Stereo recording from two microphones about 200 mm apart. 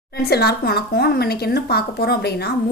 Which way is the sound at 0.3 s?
55° left (ahead or behind).